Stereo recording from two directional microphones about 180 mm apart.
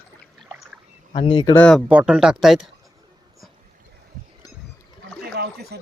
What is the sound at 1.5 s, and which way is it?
Speech, 5° left (ahead or behind).